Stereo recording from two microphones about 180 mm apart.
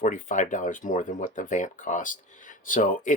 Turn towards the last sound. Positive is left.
turn(degrees=45)  # may be behind; listen again after turning